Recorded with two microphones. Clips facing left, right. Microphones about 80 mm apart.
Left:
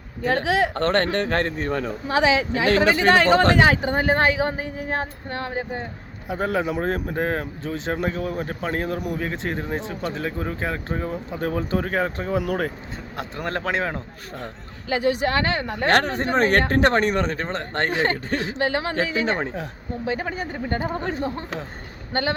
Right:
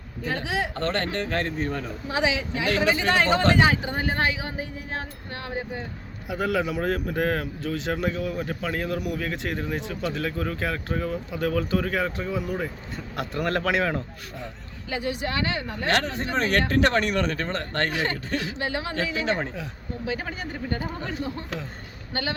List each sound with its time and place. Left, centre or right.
0.2 s speech: left
2.6 s speech: left
2.9 s speech: left
6.2 s speech: left
12.4 s speech: left
13.1 s a man's voice: left
14.8 s speech: left
18.6 s speech: left